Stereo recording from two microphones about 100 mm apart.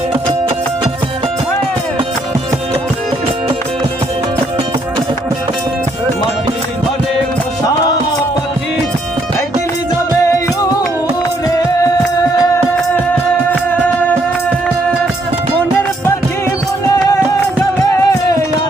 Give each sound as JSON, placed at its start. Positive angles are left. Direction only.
{"t": 0.1, "sound": "music", "side_deg": -70}
{"t": 13.5, "sound": "music", "side_deg": 15}
{"t": 17.6, "sound": "music", "side_deg": 25}